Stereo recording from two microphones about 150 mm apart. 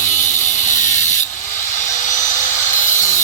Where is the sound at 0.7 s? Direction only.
55° left (ahead or behind).